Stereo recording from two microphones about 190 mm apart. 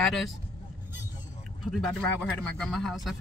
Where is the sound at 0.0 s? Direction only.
Centre (ahead or behind).